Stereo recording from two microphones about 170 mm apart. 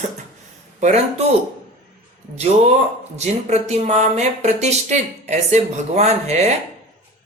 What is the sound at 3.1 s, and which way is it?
Speech, 40° right (ahead or behind).